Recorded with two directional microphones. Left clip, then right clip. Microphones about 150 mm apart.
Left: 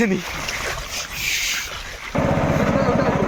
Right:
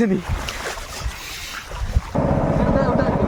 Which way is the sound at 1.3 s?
35° right (ahead or behind).